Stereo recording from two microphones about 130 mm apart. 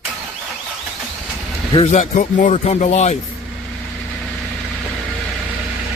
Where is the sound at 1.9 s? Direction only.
65° left (ahead or behind).